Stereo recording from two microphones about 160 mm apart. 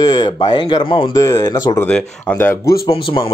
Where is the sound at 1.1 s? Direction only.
20° left (ahead or behind).